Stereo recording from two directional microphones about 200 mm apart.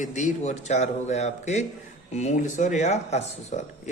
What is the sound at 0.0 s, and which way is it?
Speech, 40° left (ahead or behind).